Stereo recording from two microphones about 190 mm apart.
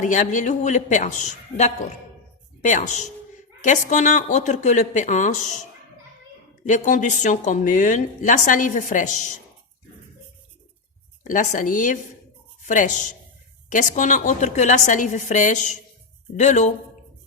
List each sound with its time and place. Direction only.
0.0 s a woman's voice: 40° left (ahead or behind)
6.7 s a woman's voice: 40° left (ahead or behind)
11.2 s a woman's voice: 40° left (ahead or behind)